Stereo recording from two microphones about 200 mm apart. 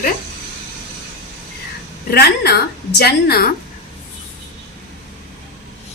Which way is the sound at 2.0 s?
50° left (ahead or behind).